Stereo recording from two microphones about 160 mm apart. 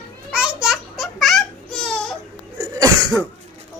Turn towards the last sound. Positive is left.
turn(degrees=-20)  # may be behind; listen again after turning